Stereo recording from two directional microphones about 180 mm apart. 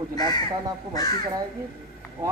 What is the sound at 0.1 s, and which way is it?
Speech, 20° left (ahead or behind).